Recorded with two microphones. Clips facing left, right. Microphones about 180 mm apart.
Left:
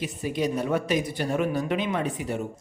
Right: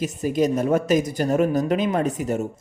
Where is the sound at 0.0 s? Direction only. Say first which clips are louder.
Right 6 dB; 45° right (ahead or behind).